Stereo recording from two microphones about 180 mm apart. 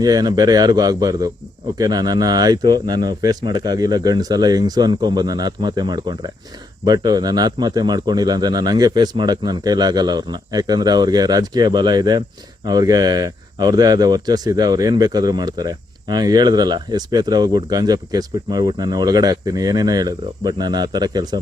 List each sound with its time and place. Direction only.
0.0 s speech: 20° right (ahead or behind)